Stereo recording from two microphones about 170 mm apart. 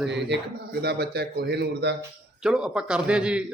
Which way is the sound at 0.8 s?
70° right (ahead or behind).